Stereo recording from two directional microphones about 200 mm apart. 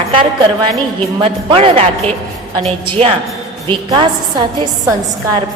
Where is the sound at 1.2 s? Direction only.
30° right (ahead or behind).